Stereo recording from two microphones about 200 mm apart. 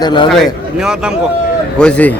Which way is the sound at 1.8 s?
5° left (ahead or behind).